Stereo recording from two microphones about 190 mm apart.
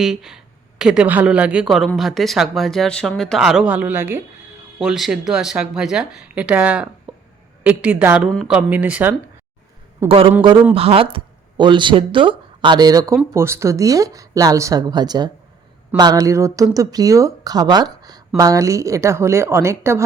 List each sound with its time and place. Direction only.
0.0 s speech: centre (ahead or behind)
10.1 s speech: 30° right (ahead or behind); by 20.1 s 15° right (ahead or behind)